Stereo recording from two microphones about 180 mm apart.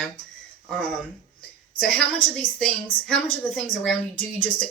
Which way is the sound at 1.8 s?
5° left (ahead or behind).